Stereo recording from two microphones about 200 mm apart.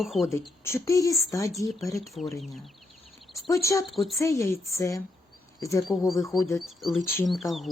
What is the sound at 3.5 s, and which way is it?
Speech, 15° left (ahead or behind).